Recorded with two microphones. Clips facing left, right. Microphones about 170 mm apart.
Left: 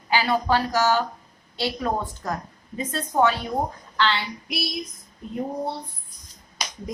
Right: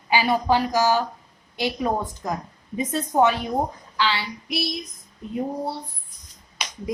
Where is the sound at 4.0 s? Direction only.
5° right (ahead or behind).